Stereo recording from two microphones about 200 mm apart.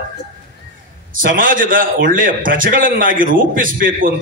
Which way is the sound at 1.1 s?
45° right (ahead or behind).